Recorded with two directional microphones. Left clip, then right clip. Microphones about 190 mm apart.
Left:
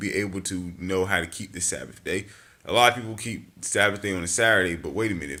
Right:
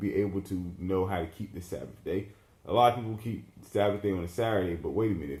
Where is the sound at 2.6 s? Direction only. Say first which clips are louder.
Left 4 dB; 15° left (ahead or behind).